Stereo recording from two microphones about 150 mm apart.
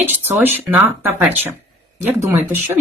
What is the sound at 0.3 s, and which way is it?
Speech, 15° right (ahead or behind).